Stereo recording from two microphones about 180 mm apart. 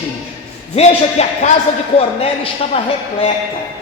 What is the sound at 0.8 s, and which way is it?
Speech, 40° left (ahead or behind).